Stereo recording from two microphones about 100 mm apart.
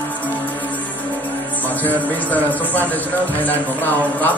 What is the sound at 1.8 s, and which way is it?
Speech, 15° left (ahead or behind).